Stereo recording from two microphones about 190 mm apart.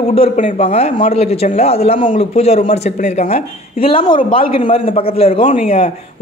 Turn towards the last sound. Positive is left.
turn(degrees=30)  # may be behind; listen again after turning